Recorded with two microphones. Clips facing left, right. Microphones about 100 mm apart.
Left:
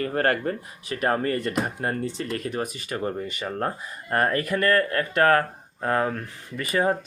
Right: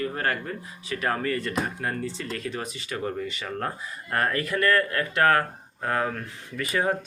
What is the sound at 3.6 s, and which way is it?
Speech, 30° left (ahead or behind).